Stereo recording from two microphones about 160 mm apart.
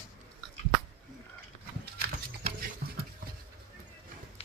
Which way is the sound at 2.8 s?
70° right (ahead or behind).